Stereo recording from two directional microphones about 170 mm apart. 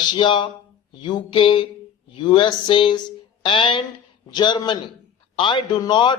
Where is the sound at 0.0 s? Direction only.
25° left (ahead or behind).